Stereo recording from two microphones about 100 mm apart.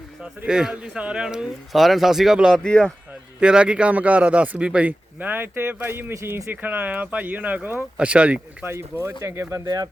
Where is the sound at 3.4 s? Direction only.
10° right (ahead or behind).